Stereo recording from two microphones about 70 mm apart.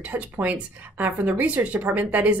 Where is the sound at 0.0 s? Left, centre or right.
Right.